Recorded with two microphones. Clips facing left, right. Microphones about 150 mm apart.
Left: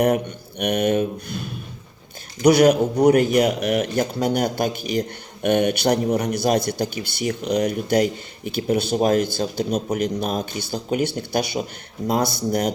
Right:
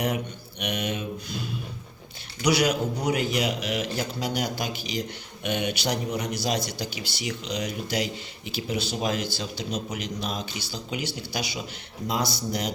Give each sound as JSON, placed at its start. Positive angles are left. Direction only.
{"t": 0.6, "sound": "speech", "side_deg": 55}